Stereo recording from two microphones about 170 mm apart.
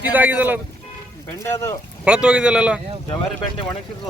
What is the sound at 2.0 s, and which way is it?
Speech, 5° right (ahead or behind).